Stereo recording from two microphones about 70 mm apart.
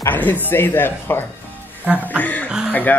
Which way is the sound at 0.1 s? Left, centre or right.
Left.